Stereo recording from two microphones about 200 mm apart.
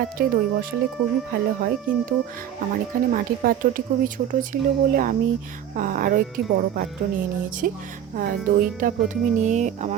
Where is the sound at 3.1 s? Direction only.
45° right (ahead or behind).